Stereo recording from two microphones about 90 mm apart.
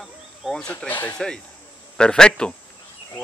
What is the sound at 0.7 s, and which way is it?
Speech, 20° left (ahead or behind).